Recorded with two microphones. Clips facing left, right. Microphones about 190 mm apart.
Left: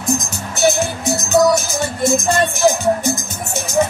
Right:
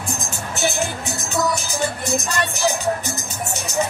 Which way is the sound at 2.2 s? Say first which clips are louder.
Left 7 dB; 45° left (ahead or behind).